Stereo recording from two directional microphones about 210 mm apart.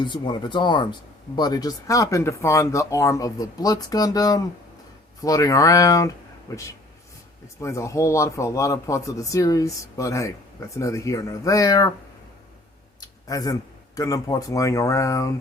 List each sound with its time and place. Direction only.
0.0 s speech: 20° left (ahead or behind)
13.0 s a man's voice: 15° left (ahead or behind)